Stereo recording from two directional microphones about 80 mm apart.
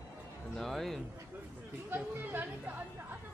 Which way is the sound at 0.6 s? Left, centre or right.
Centre.